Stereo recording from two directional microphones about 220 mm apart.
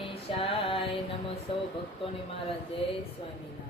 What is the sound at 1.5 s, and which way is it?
Female singing, 25° left (ahead or behind).